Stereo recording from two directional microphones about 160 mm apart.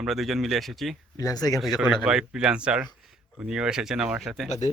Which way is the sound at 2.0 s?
5° right (ahead or behind).